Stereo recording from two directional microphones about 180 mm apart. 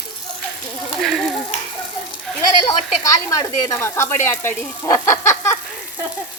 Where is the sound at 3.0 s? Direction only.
20° left (ahead or behind).